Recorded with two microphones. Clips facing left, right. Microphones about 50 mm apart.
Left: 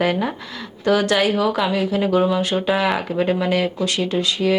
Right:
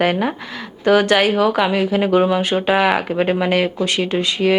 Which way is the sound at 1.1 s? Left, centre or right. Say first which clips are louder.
Right 3 dB; centre.